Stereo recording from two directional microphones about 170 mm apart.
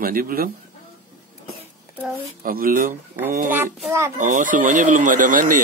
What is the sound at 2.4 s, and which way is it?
Speech, 55° right (ahead or behind).